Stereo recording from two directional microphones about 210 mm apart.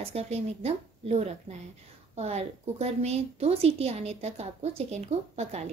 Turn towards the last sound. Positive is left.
turn(degrees=-30)  # may be behind; listen again after turning